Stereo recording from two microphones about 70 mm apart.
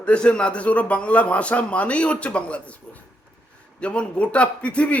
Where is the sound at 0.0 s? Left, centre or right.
Centre.